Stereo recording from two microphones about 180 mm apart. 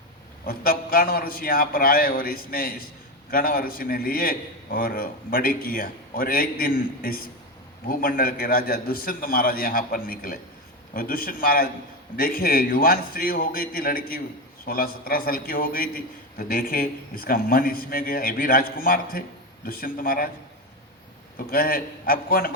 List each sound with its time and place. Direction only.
0.4 s a man's voice: 55° left (ahead or behind)
21.3 s a man's voice: 55° left (ahead or behind)